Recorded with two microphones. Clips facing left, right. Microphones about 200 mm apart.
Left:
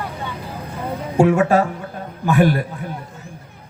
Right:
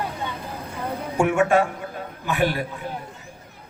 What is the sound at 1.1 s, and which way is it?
Speech, 35° left (ahead or behind).